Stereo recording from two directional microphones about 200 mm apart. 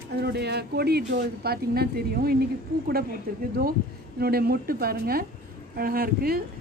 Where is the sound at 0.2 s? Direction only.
55° right (ahead or behind).